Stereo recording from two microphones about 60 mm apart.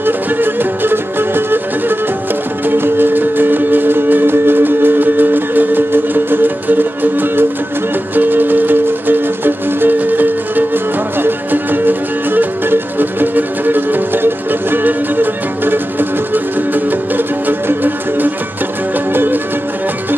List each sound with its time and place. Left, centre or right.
0.0 s music: right
17.5 s music: right